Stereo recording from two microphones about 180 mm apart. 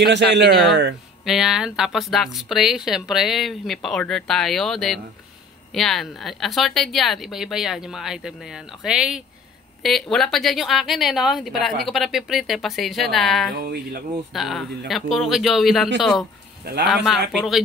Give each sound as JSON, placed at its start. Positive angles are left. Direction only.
{"t": 0.0, "sound": "a man's voice", "side_deg": -75}
{"t": 1.2, "sound": "speech", "side_deg": 0}
{"t": 13.6, "sound": "speech", "side_deg": -60}
{"t": 14.3, "sound": "speech", "side_deg": 0}